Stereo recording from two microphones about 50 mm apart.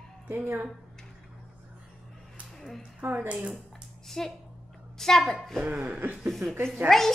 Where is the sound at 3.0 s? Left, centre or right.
Right.